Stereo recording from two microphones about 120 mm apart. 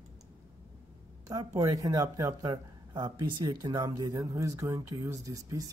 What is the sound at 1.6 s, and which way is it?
Speech, 30° right (ahead or behind).